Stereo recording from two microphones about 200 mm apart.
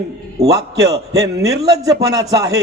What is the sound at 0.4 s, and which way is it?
A man's voice, 20° right (ahead or behind).